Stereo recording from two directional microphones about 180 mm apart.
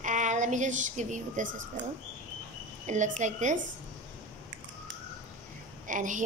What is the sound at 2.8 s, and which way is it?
Speech, 40° right (ahead or behind).